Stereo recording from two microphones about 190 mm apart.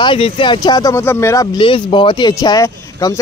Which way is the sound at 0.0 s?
25° left (ahead or behind).